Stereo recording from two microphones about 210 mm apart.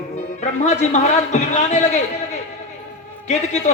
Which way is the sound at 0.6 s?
35° left (ahead or behind).